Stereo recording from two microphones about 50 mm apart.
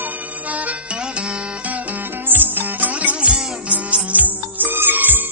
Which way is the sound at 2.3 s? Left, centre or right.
Right.